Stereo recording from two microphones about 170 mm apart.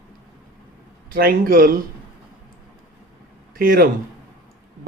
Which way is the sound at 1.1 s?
60° right (ahead or behind).